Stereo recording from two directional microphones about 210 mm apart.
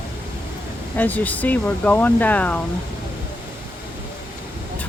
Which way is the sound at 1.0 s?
10° left (ahead or behind).